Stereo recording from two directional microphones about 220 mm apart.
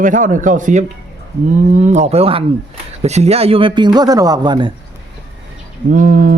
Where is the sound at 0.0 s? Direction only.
35° right (ahead or behind); by 4.7 s 20° right (ahead or behind).